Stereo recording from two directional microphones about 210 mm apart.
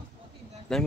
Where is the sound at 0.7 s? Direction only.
Centre (ahead or behind).